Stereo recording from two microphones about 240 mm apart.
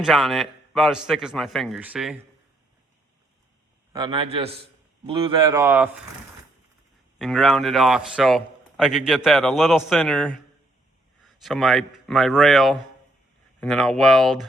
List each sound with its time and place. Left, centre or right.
0.0 s a man's voice: centre
3.9 s a man's voice: centre
7.2 s a man's voice: centre
11.4 s a man's voice: centre